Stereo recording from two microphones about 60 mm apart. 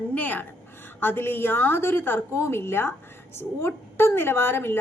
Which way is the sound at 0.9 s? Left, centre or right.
Left.